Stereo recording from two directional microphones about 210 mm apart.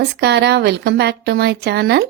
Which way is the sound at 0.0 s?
55° right (ahead or behind).